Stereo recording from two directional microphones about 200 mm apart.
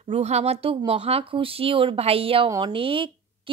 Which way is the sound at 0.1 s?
30° right (ahead or behind).